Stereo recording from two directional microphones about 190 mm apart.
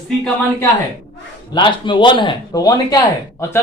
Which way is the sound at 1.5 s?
25° left (ahead or behind).